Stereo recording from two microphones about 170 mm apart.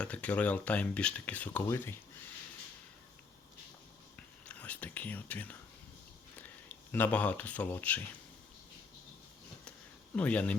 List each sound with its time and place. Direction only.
0.0 s speech: 10° left (ahead or behind)
4.4 s speech: 10° left (ahead or behind)
6.9 s speech: 10° left (ahead or behind)
10.2 s speech: 10° left (ahead or behind)